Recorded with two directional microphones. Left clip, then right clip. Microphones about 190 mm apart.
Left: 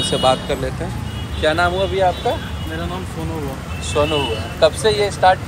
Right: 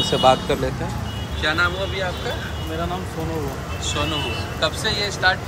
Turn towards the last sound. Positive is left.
turn(degrees=10)  # may be behind; listen again after turning